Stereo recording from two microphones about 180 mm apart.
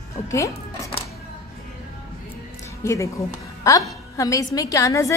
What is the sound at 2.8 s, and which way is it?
A woman's voice, 15° left (ahead or behind).